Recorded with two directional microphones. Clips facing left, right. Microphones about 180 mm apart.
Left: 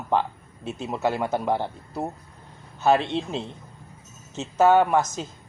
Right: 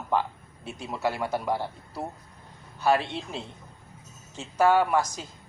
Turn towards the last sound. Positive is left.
turn(degrees=25)  # may be behind; listen again after turning